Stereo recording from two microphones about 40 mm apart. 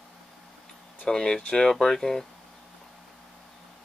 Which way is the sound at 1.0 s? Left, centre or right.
Centre.